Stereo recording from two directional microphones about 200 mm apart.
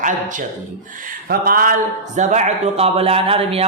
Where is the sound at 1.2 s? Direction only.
45° right (ahead or behind).